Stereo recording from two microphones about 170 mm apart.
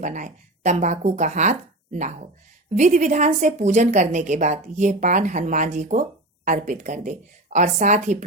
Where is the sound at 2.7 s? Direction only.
45° right (ahead or behind).